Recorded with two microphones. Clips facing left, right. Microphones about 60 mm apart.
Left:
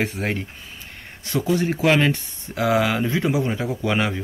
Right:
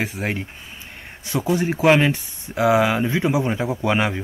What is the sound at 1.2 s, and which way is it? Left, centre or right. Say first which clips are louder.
Speech: even; centre.